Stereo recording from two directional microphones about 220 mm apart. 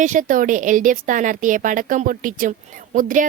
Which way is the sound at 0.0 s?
35° right (ahead or behind).